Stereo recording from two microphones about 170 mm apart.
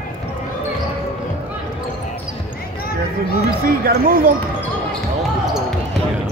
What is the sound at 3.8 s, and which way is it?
Speech, 60° right (ahead or behind).